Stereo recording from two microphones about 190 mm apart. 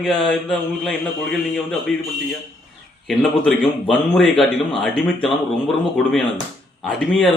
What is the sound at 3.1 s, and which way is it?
A man's voice, 5° left (ahead or behind).